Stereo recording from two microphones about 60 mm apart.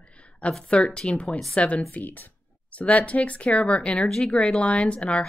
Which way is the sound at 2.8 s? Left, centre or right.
Left.